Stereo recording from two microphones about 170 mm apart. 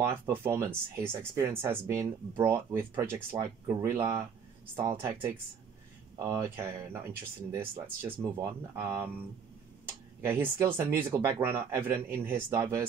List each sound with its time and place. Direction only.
0.3 s speech: 15° right (ahead or behind)
10.2 s speech: 15° right (ahead or behind)